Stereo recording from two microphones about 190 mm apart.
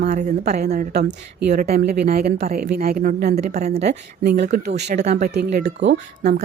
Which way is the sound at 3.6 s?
35° right (ahead or behind).